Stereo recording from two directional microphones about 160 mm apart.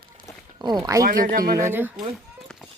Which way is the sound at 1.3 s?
65° right (ahead or behind).